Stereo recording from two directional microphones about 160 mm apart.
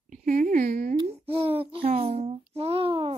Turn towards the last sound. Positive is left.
turn(degrees=-35)  # may be behind; listen again after turning